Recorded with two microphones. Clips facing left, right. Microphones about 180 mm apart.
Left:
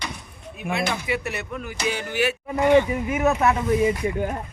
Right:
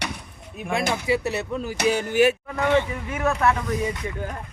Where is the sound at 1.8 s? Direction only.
45° right (ahead or behind).